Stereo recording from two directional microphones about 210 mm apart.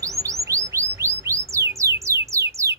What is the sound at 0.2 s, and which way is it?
Chirp, 15° right (ahead or behind).